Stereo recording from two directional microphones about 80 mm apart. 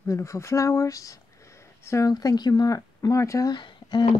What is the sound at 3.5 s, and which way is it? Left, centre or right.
Speech, left.